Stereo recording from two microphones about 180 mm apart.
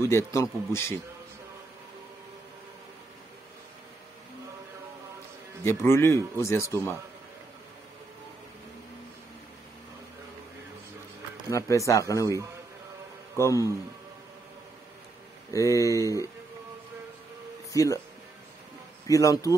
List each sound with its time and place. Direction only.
0.0 s speech: 15° left (ahead or behind)
5.6 s speech: 15° left (ahead or behind)
11.5 s speech: 15° left (ahead or behind)
13.4 s speech: 20° left (ahead or behind)
15.5 s speech: 15° left (ahead or behind)
17.7 s speech: 20° left (ahead or behind)
19.0 s speech: 20° left (ahead or behind)